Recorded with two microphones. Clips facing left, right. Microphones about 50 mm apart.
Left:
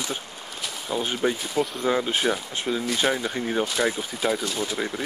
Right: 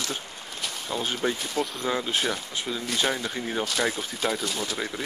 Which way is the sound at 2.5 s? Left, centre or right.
Left.